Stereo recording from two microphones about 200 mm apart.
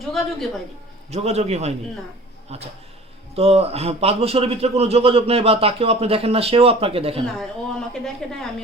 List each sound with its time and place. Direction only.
1.1 s a man's voice: 30° right (ahead or behind)
7.3 s a woman's voice: centre (ahead or behind)